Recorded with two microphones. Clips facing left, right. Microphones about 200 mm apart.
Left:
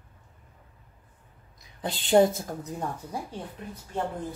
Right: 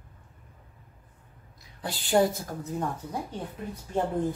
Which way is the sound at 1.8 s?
20° left (ahead or behind).